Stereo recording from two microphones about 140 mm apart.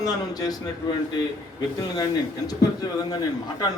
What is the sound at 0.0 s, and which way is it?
Speech, 25° left (ahead or behind).